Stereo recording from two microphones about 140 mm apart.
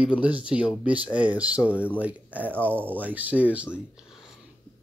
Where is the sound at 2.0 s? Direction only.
10° right (ahead or behind).